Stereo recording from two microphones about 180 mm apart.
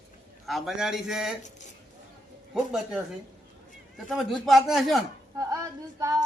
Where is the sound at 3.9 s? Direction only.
Centre (ahead or behind).